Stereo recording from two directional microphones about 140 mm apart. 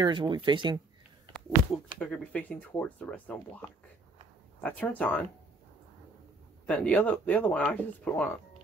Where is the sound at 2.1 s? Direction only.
10° left (ahead or behind).